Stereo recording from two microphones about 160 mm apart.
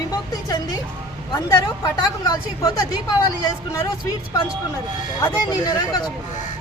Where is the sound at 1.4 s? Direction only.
20° left (ahead or behind).